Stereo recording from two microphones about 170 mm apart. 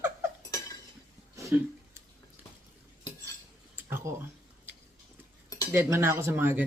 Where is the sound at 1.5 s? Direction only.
10° right (ahead or behind).